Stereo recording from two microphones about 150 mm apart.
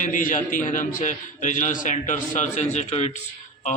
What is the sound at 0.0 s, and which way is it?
A man's voice, 60° left (ahead or behind).